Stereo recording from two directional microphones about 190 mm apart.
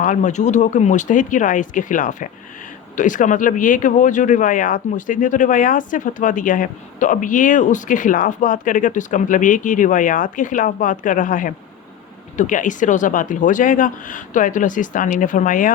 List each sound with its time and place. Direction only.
0.0 s speech: 40° left (ahead or behind)